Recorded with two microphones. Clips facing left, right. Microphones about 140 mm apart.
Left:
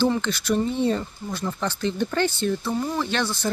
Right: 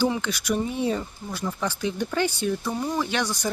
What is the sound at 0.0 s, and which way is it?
Speech, 10° right (ahead or behind).